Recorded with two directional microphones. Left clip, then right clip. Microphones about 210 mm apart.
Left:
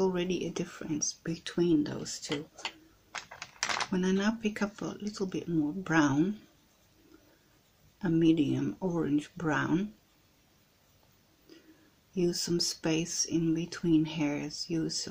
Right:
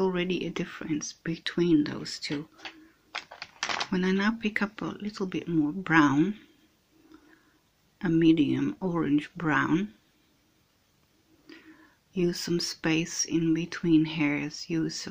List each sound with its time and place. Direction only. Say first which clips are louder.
0.0 s speech: right 2 dB; 10° right (ahead or behind)
3.1 s typewriter: right 3 dB; 35° right (ahead or behind)
3.9 s speech: right 3 dB; 10° right (ahead or behind)
8.0 s speech: right 4 dB; 10° right (ahead or behind)
12.1 s speech: right 2 dB; 10° right (ahead or behind)